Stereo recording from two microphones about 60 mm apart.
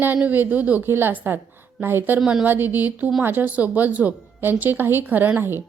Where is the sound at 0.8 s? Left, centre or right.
Right.